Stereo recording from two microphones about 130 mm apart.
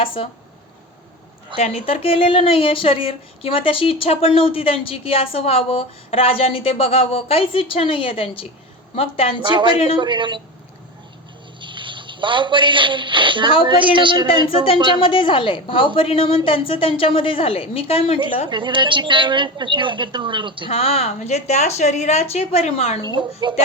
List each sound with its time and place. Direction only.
0.0 s speech: 45° left (ahead or behind)
1.5 s speech: 50° left (ahead or behind)
9.5 s a woman's voice: 40° right (ahead or behind)
11.6 s a woman's voice: 40° right (ahead or behind)
14.9 s a woman's voice: 40° left (ahead or behind)
18.4 s a woman's voice: 35° right (ahead or behind)
20.7 s a woman's voice: 50° left (ahead or behind)
23.0 s a woman's voice: 35° right (ahead or behind)